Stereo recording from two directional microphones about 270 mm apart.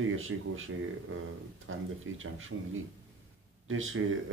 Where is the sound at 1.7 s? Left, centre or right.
Right.